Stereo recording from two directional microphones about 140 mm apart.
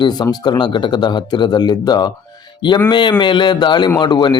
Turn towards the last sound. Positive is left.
turn(degrees=35)  # may be behind; listen again after turning